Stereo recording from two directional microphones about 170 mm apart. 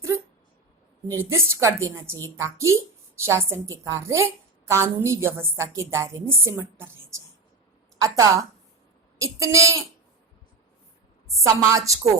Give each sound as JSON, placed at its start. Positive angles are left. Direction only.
{"t": 1.1, "sound": "a woman's voice", "side_deg": -15}
{"t": 11.3, "sound": "a woman's voice", "side_deg": -20}